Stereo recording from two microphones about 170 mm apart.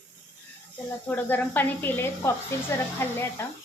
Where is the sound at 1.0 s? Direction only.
10° left (ahead or behind).